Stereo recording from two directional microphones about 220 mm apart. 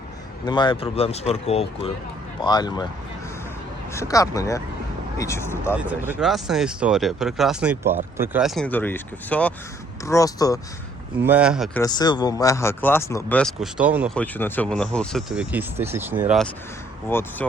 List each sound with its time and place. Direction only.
0.4 s speech: 20° left (ahead or behind)
3.9 s speech: 15° left (ahead or behind)
5.7 s speech: 5° right (ahead or behind); by 10.6 s 15° left (ahead or behind)
11.2 s speech: 5° right (ahead or behind)
11.8 s speech: 20° left (ahead or behind); by 14.2 s 5° right (ahead or behind)
14.2 s speech: 10° left (ahead or behind); by 16.4 s 10° right (ahead or behind)
17.1 s speech: 10° left (ahead or behind)